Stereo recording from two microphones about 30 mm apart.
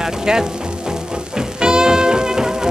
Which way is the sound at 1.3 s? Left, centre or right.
Right.